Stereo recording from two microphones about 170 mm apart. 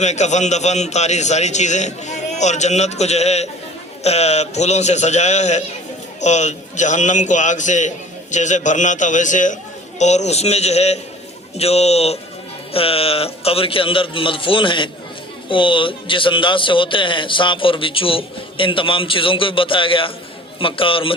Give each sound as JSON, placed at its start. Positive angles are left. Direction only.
{"t": 0.0, "sound": "a man's voice", "side_deg": 45}